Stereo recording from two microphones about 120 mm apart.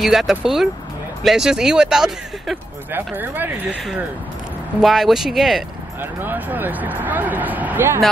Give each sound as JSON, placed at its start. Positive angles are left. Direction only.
{"t": 0.0, "sound": "speech", "side_deg": 0}
{"t": 2.9, "sound": "speech", "side_deg": -15}
{"t": 4.7, "sound": "speech", "side_deg": 0}
{"t": 6.2, "sound": "speech", "side_deg": -15}